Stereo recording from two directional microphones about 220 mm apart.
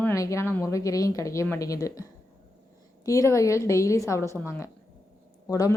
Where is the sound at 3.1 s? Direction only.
15° left (ahead or behind).